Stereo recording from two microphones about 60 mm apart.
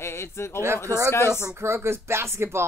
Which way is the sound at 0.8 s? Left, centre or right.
Right.